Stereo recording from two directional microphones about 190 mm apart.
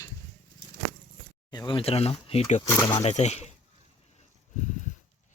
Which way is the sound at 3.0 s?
35° left (ahead or behind).